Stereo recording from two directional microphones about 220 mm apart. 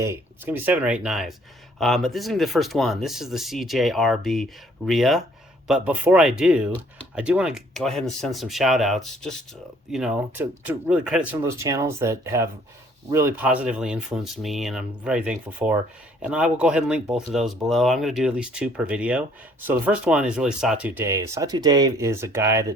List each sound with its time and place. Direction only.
0.0 s speech: 10° right (ahead or behind)